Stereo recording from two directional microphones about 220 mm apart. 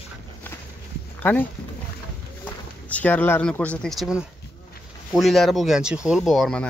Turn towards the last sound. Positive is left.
turn(degrees=5)  # may be behind; listen again after turning